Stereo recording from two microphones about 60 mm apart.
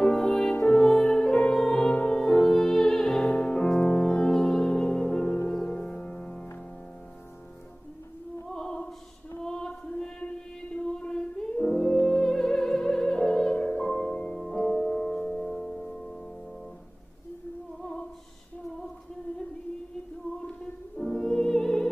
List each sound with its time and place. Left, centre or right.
0.0 s music: centre
8.5 s opera: centre
9.4 s chant: centre
12.2 s music: centre
21.0 s music: centre